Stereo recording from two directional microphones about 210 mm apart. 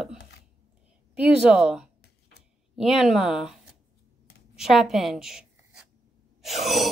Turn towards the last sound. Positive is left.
turn(degrees=0)  # may be behind; listen again after turning